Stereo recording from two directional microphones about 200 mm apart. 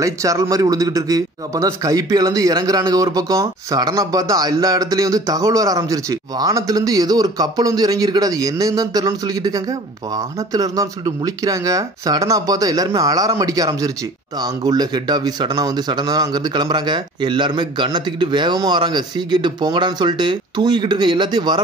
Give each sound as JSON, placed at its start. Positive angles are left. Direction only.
{"t": 0.0, "sound": "a man's voice", "side_deg": -15}